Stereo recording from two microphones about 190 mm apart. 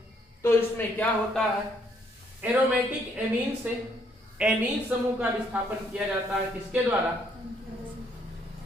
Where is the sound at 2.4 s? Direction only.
5° right (ahead or behind).